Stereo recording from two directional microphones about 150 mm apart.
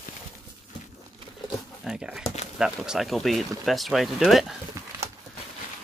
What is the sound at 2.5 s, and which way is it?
Speech, 5° right (ahead or behind).